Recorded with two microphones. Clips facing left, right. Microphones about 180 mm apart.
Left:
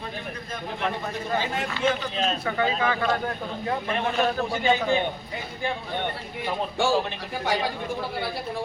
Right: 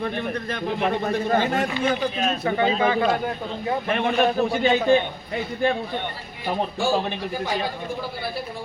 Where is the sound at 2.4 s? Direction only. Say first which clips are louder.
Right 6 dB; 25° right (ahead or behind).